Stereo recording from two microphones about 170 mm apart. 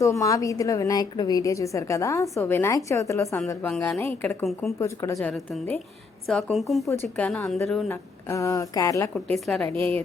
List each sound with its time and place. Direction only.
0.0 s a woman's voice: 20° left (ahead or behind); by 6.8 s centre (ahead or behind)
6.8 s a woman's voice: 15° left (ahead or behind)
7.9 s a woman's voice: 15° left (ahead or behind)